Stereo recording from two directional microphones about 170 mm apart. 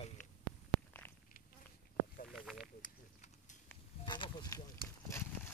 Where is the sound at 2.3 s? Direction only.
Centre (ahead or behind).